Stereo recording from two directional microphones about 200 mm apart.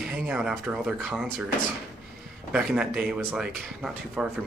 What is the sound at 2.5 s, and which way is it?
Speech, 5° right (ahead or behind).